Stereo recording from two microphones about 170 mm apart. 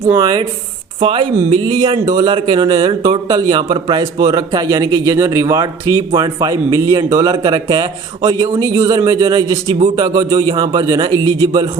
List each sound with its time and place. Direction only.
0.0 s speech: 20° right (ahead or behind)